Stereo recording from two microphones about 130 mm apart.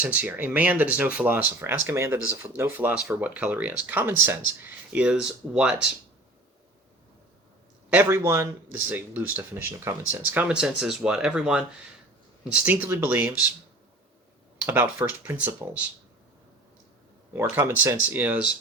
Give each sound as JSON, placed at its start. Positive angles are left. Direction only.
{"t": 0.0, "sound": "speech", "side_deg": -10}
{"t": 7.9, "sound": "speech", "side_deg": -15}
{"t": 12.6, "sound": "speech", "side_deg": -15}
{"t": 14.6, "sound": "speech", "side_deg": -15}
{"t": 17.3, "sound": "speech", "side_deg": -15}